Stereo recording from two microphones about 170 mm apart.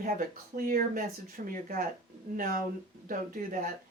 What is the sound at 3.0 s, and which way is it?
Speech, 55° right (ahead or behind).